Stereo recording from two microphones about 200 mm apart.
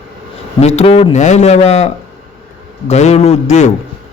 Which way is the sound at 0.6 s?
30° left (ahead or behind).